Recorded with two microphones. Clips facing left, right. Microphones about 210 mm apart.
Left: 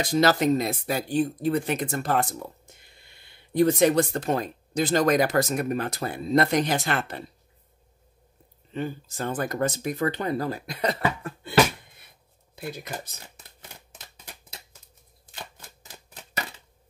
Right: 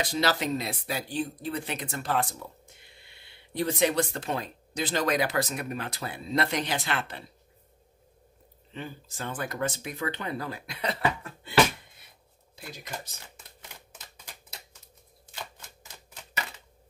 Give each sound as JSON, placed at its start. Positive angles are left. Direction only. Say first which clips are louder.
{"t": 0.0, "sound": "speech", "louder": "left 6 dB", "side_deg": 45}
{"t": 8.7, "sound": "speech", "louder": "left 8 dB", "side_deg": 45}
{"t": 12.5, "sound": "speech", "louder": "left 6 dB", "side_deg": 55}